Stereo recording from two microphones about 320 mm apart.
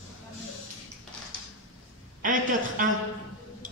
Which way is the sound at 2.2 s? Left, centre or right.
Right.